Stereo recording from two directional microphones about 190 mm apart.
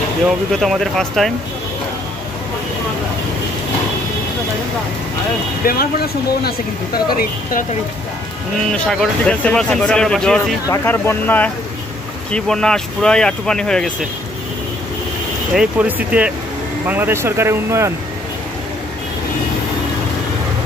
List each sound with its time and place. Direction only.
0.6 s speech: centre (ahead or behind)
5.7 s speech: 55° left (ahead or behind)
8.7 s speech: 5° left (ahead or behind)
15.5 s speech: 5° right (ahead or behind)